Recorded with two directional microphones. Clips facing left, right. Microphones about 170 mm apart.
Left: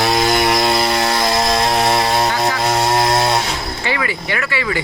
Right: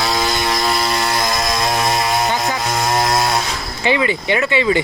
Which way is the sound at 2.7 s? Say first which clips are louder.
Even; 30° left (ahead or behind).